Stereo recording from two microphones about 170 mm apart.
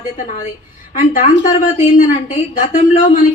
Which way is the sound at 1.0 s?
50° left (ahead or behind).